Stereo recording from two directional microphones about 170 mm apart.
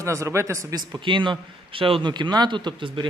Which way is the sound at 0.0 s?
15° right (ahead or behind).